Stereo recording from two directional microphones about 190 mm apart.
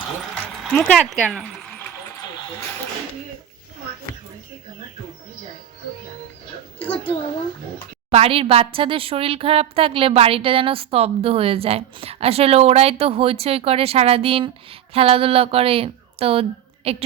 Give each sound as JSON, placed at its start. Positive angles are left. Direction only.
{"t": 0.6, "sound": "speech", "side_deg": 0}
{"t": 8.1, "sound": "a woman's voice", "side_deg": -30}